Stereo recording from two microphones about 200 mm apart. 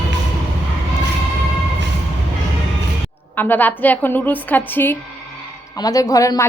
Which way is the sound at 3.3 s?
10° left (ahead or behind).